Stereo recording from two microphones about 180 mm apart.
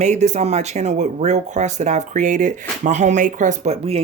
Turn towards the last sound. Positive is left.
turn(degrees=-35)  # may be behind; listen again after turning